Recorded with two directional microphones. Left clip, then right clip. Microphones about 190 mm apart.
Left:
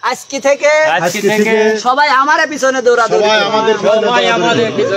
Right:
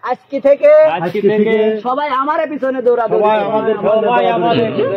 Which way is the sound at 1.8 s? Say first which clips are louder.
Left 6 dB; 5° left (ahead or behind).